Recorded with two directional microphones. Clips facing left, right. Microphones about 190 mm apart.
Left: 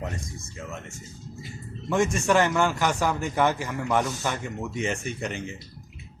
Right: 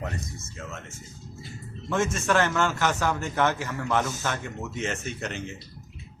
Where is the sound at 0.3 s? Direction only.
15° left (ahead or behind).